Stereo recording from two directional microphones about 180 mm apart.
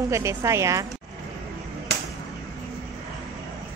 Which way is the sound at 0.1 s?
15° right (ahead or behind).